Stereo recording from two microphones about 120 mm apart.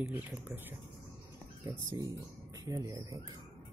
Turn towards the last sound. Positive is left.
turn(degrees=-30)  # may be behind; listen again after turning